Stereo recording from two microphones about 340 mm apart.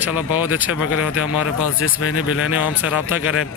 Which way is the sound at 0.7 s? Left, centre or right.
Left.